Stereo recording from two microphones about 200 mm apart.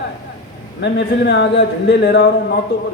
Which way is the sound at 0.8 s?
60° left (ahead or behind).